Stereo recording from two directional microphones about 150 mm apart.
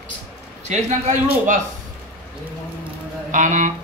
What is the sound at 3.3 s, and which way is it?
Speech, 55° right (ahead or behind).